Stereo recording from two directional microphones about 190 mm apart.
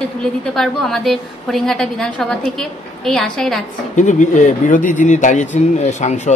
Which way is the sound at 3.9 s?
40° left (ahead or behind).